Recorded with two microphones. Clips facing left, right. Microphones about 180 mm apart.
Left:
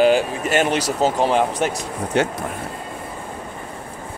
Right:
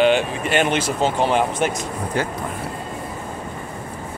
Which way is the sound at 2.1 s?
75° left (ahead or behind).